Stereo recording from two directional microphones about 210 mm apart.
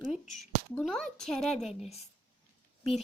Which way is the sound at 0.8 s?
Centre (ahead or behind).